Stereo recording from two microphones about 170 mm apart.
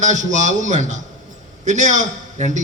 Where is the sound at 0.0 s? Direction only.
45° right (ahead or behind).